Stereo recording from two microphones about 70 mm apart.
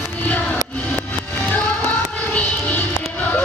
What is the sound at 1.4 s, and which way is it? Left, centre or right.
Music, left.